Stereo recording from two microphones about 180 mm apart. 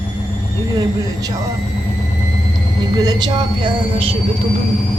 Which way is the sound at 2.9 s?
25° right (ahead or behind).